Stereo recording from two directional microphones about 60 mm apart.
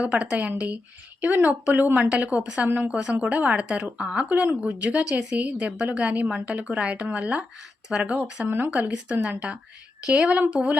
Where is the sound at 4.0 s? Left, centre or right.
Centre.